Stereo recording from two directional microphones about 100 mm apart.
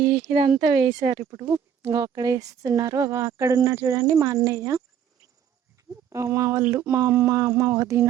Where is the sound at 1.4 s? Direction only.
35° right (ahead or behind).